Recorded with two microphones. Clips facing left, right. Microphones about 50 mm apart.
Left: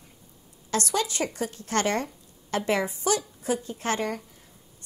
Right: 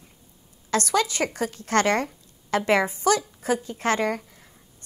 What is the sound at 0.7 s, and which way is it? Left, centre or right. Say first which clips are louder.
A woman's voice: right 4 dB; right.